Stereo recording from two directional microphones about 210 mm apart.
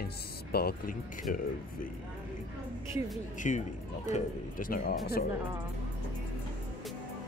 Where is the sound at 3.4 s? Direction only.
35° left (ahead or behind).